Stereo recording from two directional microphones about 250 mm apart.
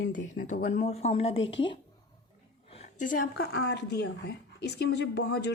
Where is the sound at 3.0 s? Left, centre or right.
Left.